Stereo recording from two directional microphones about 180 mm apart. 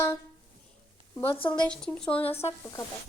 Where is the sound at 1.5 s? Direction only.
5° left (ahead or behind).